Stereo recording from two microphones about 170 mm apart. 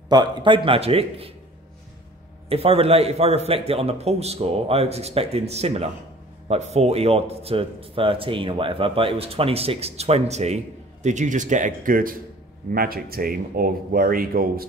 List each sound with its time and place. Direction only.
0.1 s a man's voice: 25° right (ahead or behind)
2.5 s a man's voice: 35° right (ahead or behind); by 14.6 s 60° right (ahead or behind)